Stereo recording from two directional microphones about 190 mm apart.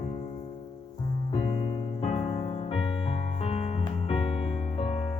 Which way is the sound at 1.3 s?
30° left (ahead or behind).